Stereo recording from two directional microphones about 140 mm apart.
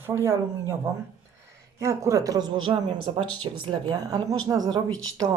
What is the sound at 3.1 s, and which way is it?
Speech, 45° right (ahead or behind).